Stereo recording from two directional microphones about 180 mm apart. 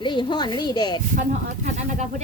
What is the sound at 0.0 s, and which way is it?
Speech, 25° left (ahead or behind).